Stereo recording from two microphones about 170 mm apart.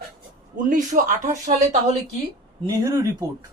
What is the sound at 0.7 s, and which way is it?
Speech, 50° right (ahead or behind).